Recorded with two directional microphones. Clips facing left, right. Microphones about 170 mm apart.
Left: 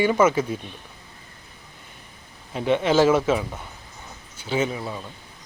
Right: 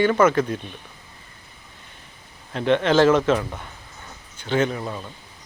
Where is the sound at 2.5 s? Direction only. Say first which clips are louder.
Right 1 dB; 10° left (ahead or behind).